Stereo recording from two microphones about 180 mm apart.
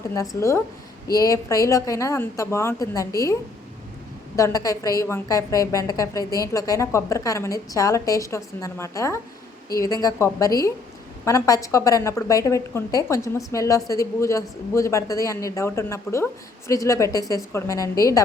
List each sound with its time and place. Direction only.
0.1 s a woman's voice: 15° left (ahead or behind)
4.4 s a woman's voice: 20° left (ahead or behind)